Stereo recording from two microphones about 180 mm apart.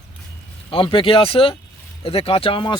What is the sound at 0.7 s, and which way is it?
Speech, 30° left (ahead or behind).